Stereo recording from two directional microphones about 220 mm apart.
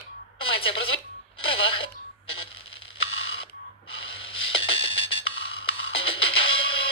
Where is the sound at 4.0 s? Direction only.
25° left (ahead or behind).